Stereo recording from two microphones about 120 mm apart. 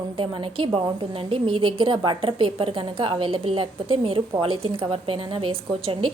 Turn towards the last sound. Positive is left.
turn(degrees=-50)  # may be behind; listen again after turning